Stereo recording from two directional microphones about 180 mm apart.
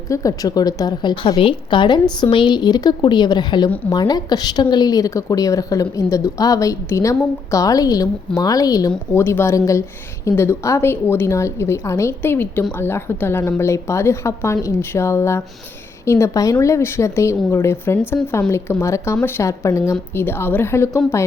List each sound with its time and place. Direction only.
0.1 s a woman's voice: 20° left (ahead or behind)